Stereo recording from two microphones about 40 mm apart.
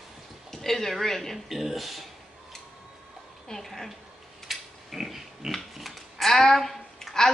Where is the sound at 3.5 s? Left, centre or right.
Centre.